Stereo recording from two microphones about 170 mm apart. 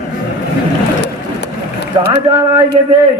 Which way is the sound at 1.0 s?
85° left.